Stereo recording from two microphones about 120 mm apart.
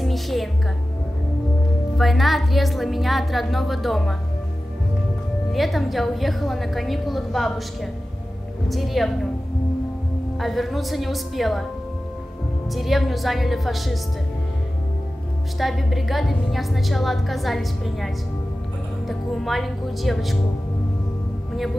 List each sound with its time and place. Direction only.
0.0 s music: centre (ahead or behind)
2.0 s a woman's voice: centre (ahead or behind)
5.5 s a woman's voice: centre (ahead or behind)
10.4 s a woman's voice: centre (ahead or behind)
12.6 s a woman's voice: centre (ahead or behind)
15.6 s a woman's voice: centre (ahead or behind)